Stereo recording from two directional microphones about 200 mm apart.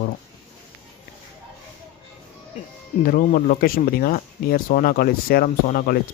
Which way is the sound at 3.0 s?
45° left (ahead or behind).